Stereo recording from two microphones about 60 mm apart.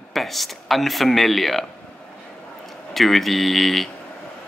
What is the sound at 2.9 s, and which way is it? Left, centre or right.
Speech, centre.